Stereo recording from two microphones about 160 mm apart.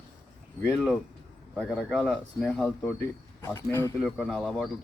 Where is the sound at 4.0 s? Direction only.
Centre (ahead or behind).